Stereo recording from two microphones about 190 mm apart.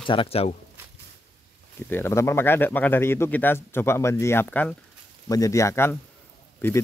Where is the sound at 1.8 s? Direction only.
10° left (ahead or behind).